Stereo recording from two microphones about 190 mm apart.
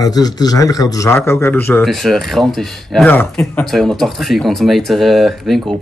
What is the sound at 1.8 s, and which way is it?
Speech, centre (ahead or behind).